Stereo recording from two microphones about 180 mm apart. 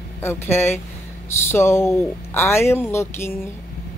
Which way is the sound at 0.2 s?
15° left (ahead or behind).